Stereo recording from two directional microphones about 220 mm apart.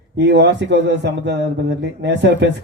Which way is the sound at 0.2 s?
50° right (ahead or behind).